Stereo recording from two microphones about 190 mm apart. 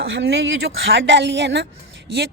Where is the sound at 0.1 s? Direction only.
65° right (ahead or behind).